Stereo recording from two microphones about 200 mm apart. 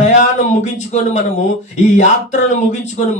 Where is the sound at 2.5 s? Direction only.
35° left (ahead or behind).